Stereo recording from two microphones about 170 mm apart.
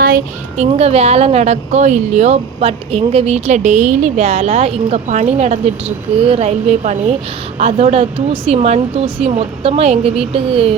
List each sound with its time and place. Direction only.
0.0 s speech: 55° right (ahead or behind); by 10.8 s 35° right (ahead or behind)